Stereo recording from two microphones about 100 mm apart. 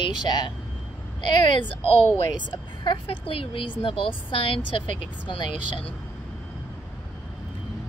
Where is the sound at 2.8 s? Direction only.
65° left (ahead or behind).